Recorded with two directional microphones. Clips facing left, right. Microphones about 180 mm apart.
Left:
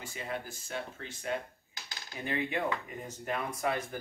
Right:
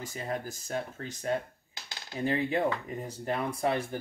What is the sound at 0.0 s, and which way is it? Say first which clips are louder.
Speech: right 4 dB; 40° right (ahead or behind).